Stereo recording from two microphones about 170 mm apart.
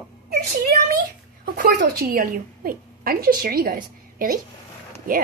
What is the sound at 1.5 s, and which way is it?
A woman's voice, 55° right (ahead or behind).